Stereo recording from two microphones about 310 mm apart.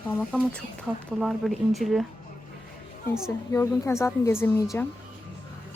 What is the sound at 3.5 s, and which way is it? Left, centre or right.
Speech, centre.